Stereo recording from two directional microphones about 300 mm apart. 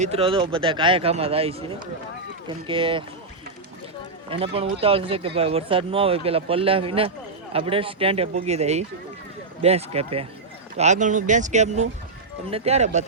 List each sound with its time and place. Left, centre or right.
0.0 s speech: centre
2.6 s speech: centre
4.5 s speech: centre